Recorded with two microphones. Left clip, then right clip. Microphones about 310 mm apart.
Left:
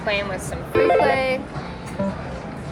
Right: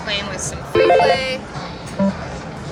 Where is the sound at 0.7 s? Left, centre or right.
Centre.